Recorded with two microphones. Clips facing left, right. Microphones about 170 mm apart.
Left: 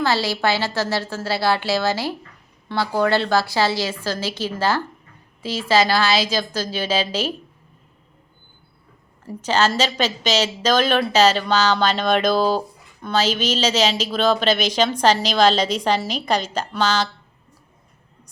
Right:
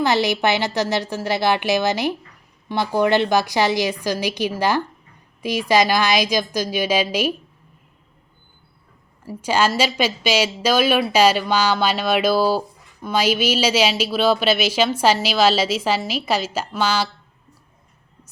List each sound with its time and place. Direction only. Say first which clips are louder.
0.0 s a woman's voice: right 2 dB; 20° right (ahead or behind)
9.2 s a woman's voice: even; 10° right (ahead or behind)